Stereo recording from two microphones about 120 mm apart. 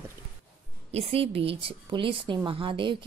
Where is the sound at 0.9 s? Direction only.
55° right (ahead or behind).